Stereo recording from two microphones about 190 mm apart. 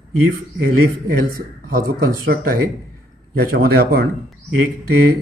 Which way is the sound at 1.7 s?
50° right (ahead or behind).